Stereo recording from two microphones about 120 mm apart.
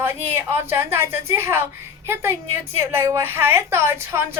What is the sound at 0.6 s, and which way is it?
Speech, 20° right (ahead or behind).